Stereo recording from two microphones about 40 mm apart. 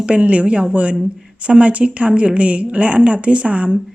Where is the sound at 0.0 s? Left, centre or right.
Right.